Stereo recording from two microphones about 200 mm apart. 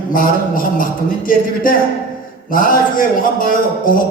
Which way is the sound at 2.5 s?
45° left (ahead or behind).